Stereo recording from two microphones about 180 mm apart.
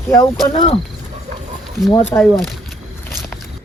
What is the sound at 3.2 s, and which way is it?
Vehicle, 20° right (ahead or behind).